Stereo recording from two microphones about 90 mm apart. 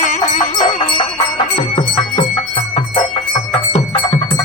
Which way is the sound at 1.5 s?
70° left (ahead or behind).